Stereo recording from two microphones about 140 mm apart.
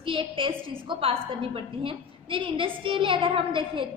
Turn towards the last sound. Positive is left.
turn(degrees=-35)  # may be behind; listen again after turning